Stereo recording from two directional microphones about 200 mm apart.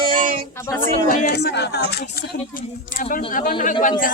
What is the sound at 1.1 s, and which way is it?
Speech, 55° left (ahead or behind).